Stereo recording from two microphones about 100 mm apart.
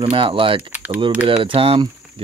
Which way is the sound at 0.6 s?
15° right (ahead or behind).